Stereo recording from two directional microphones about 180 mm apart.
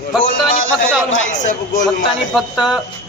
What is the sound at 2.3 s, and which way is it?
Speech, 5° right (ahead or behind).